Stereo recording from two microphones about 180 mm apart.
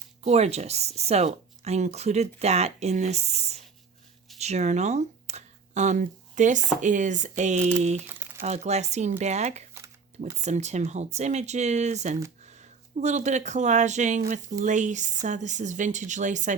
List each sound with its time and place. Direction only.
0.2 s speech: 35° right (ahead or behind)
8.0 s crumpling: 10° right (ahead or behind)
8.4 s speech: 40° right (ahead or behind)